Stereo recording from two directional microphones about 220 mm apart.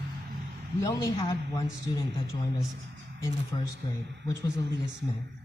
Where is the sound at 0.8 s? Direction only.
20° left (ahead or behind).